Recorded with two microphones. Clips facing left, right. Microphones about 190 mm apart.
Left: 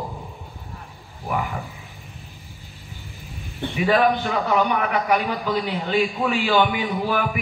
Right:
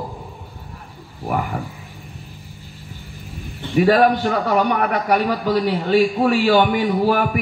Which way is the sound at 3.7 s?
45° right (ahead or behind).